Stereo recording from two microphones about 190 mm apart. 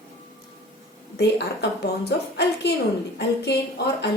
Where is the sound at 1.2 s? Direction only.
65° left (ahead or behind).